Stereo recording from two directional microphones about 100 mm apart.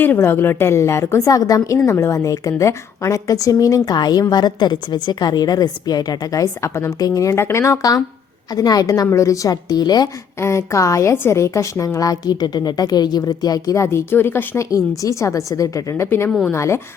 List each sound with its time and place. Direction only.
0.0 s a woman's voice: 20° left (ahead or behind); by 10.1 s 45° left (ahead or behind)
10.4 s a woman's voice: 30° left (ahead or behind)